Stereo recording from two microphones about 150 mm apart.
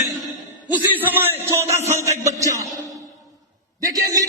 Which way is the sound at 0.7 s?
10° right (ahead or behind).